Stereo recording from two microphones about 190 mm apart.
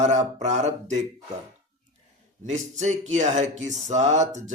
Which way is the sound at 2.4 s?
40° right (ahead or behind).